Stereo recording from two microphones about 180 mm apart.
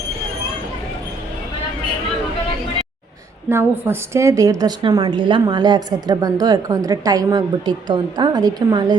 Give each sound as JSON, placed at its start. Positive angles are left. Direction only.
{"t": 3.5, "sound": "a woman's voice", "side_deg": -15}